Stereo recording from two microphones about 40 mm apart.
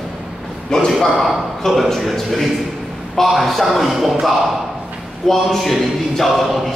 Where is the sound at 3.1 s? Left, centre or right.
Centre.